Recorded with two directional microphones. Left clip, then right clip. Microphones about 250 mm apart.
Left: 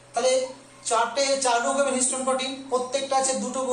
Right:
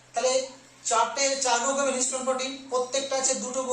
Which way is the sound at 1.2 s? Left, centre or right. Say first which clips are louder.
Left 3 dB; centre.